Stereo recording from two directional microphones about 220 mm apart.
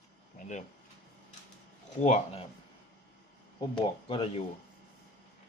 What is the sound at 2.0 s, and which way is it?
Speech, 30° left (ahead or behind).